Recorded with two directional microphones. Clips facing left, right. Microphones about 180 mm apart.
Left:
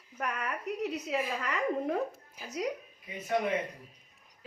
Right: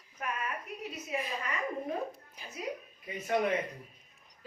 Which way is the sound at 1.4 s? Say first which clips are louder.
Left 4 dB; 75° left (ahead or behind).